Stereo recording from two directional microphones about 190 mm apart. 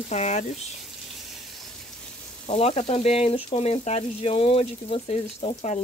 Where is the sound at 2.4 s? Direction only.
35° left (ahead or behind).